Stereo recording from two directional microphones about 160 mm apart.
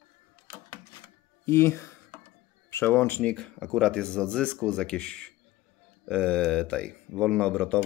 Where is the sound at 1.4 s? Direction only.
15° left (ahead or behind).